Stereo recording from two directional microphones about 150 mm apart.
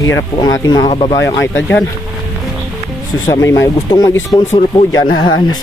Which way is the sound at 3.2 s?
20° left (ahead or behind).